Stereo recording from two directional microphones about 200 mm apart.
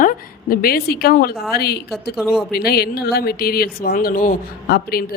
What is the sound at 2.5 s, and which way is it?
Speech, 50° left (ahead or behind).